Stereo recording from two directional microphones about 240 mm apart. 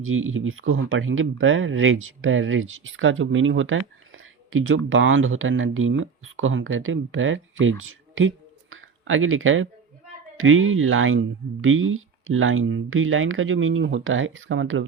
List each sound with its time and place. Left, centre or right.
0.0 s speech: right
8.7 s a sound: right
10.3 s speech: right